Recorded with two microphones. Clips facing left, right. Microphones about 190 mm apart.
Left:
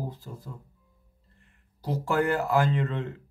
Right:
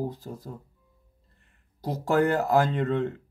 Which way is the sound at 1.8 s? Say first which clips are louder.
Right 3 dB; 40° right (ahead or behind).